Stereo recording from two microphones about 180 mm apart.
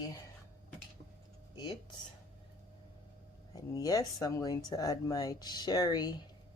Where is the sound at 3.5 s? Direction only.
20° left (ahead or behind).